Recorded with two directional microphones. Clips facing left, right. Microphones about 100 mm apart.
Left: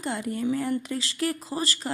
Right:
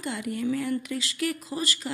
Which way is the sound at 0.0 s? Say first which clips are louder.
Left 1 dB; 35° left (ahead or behind).